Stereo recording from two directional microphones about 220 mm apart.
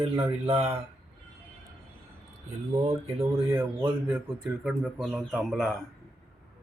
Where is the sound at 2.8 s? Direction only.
25° right (ahead or behind).